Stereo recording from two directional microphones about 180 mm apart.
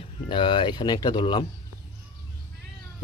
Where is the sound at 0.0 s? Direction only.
25° left (ahead or behind).